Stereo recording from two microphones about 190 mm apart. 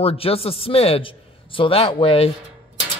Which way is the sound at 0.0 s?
30° left (ahead or behind).